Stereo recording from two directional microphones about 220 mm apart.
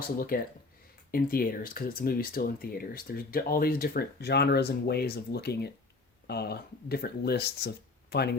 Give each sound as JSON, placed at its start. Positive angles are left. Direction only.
{"t": 0.2, "sound": "speech", "side_deg": 40}